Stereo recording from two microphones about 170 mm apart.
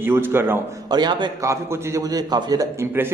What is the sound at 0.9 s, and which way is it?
A man's voice, 25° right (ahead or behind).